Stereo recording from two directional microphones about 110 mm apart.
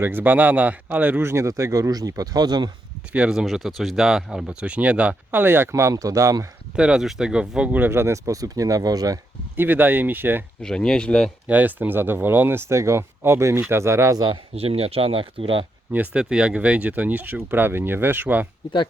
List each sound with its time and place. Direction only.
0.0 s speech: 15° right (ahead or behind); by 2.6 s 40° right (ahead or behind)
3.1 s speech: 10° right (ahead or behind); by 6.5 s 30° right (ahead or behind)
6.7 s speech: 10° right (ahead or behind); by 9.1 s 35° right (ahead or behind)
9.6 s speech: 15° right (ahead or behind)
10.6 s speech: 5° left (ahead or behind)
11.4 s speech: 15° right (ahead or behind); by 14.3 s 35° right (ahead or behind)
14.5 s speech: 65° right (ahead or behind)
15.9 s speech: 10° right (ahead or behind)